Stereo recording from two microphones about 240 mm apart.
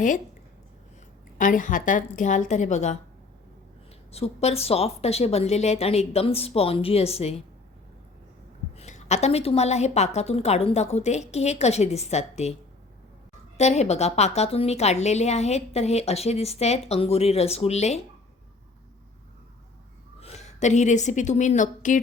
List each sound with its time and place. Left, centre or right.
1.4 s a woman's voice: left
4.1 s a woman's voice: left
8.7 s a woman's voice: left
13.6 s a woman's voice: left
20.1 s a woman's voice: left